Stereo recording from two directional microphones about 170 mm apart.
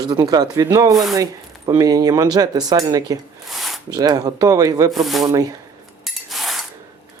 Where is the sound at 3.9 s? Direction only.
25° right (ahead or behind).